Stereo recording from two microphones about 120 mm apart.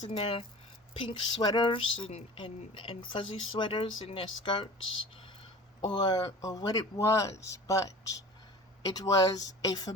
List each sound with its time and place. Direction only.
0.1 s speech: 50° left (ahead or behind)
0.9 s speech: 35° left (ahead or behind)
5.9 s speech: 35° left (ahead or behind)